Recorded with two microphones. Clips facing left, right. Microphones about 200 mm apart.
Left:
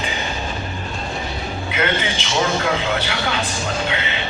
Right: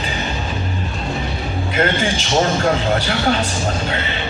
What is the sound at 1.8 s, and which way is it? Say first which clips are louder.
A man's voice: right 4 dB; 45° right (ahead or behind).